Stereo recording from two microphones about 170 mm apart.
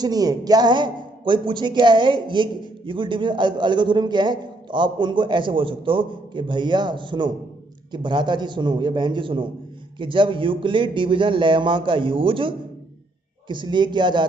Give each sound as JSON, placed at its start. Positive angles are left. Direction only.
{"t": 0.0, "sound": "a man's voice", "side_deg": -20}